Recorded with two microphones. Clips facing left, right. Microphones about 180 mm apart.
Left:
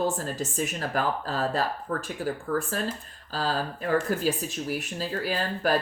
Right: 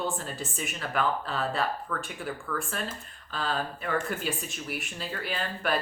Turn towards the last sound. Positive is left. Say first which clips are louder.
# left 4 dB
turn(degrees=35)  # may be behind; listen again after turning